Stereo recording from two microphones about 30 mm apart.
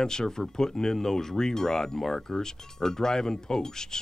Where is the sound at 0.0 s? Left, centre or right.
Centre.